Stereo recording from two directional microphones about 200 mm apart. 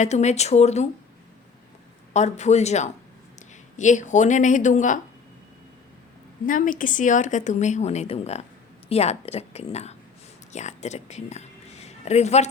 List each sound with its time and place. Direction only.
0.0 s speech: 35° left (ahead or behind)
2.1 s speech: 35° left (ahead or behind)
6.4 s a woman's voice: 40° left (ahead or behind)